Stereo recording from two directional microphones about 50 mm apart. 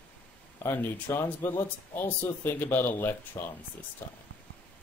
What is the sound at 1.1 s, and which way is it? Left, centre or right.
Speech, left.